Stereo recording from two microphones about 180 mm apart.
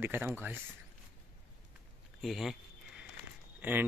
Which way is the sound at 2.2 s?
Centre (ahead or behind).